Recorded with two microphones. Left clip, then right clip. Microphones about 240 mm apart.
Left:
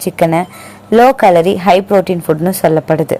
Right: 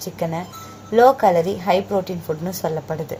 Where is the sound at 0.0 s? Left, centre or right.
Left.